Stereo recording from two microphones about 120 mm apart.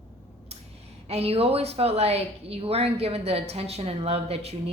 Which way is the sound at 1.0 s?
55° right (ahead or behind).